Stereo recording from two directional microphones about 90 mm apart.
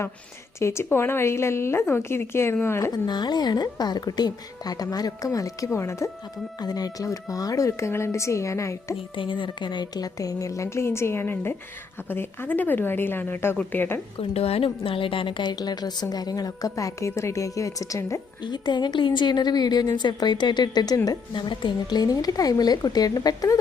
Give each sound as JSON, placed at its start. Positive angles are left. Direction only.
{"t": 0.6, "sound": "speech", "side_deg": 30}
{"t": 2.9, "sound": "a woman's voice", "side_deg": 50}
{"t": 6.6, "sound": "a woman's voice", "side_deg": 45}
{"t": 9.1, "sound": "a woman's voice", "side_deg": 65}
{"t": 14.2, "sound": "a woman's voice", "side_deg": 90}
{"t": 15.5, "sound": "a woman's voice", "side_deg": 50}
{"t": 18.4, "sound": "a woman's voice", "side_deg": 55}